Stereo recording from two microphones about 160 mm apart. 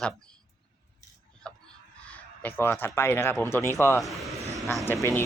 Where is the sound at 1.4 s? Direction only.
5° left (ahead or behind).